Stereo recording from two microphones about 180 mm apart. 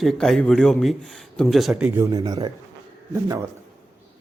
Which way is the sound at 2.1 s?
20° right (ahead or behind).